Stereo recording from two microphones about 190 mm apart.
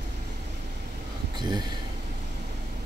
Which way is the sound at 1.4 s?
25° right (ahead or behind).